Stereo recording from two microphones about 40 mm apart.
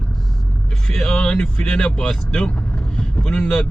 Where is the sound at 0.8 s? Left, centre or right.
Centre.